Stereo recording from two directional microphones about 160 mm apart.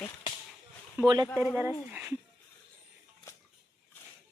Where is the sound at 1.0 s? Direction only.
25° right (ahead or behind).